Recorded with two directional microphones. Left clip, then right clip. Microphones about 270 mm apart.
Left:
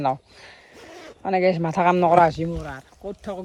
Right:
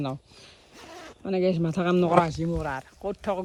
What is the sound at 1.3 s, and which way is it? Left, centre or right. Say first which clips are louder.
Speech: left 6 dB; centre.